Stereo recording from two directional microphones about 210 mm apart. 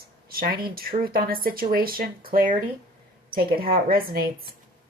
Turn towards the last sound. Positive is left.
turn(degrees=-45)  # may be behind; listen again after turning